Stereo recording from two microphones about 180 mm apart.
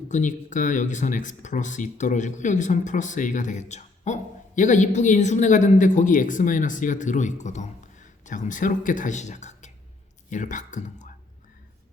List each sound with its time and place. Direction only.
0.1 s speech: 45° left (ahead or behind)